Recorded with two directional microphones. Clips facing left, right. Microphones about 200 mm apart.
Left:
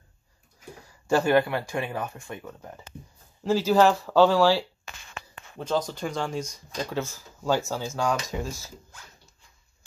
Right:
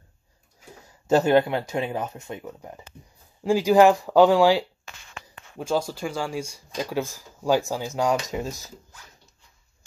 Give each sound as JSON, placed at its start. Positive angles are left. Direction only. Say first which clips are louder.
{"t": 0.8, "sound": "speech", "louder": "right 3 dB", "side_deg": -20}